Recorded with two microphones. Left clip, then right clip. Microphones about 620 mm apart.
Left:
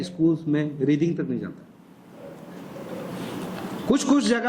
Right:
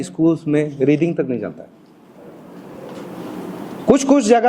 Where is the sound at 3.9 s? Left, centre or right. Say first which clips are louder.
Right 9 dB; centre.